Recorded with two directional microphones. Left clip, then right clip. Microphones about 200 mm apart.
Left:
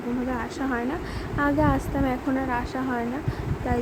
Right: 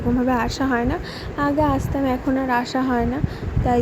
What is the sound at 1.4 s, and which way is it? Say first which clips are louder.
Speech: right 3 dB; 5° right (ahead or behind).